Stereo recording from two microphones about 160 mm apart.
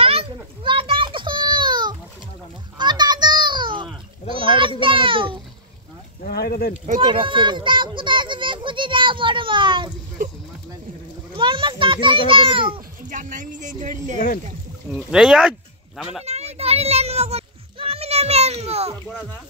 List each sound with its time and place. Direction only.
0.0 s children playing: 35° right (ahead or behind)
4.3 s a sound: 30° right (ahead or behind)
6.2 s a sound: 75° left (ahead or behind)
7.0 s a child's voice: 30° right (ahead or behind)
11.3 s a child's voice: 30° right (ahead or behind)
13.1 s speech: 55° right (ahead or behind)
14.9 s speech: 5° right (ahead or behind)
16.3 s children playing: 40° right (ahead or behind)